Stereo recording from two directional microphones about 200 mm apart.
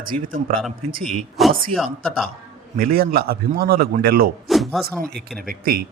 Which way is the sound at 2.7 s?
45° right (ahead or behind).